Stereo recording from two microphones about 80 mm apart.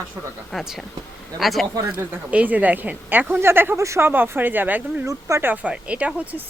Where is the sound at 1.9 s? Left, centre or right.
Centre; by 4.1 s right.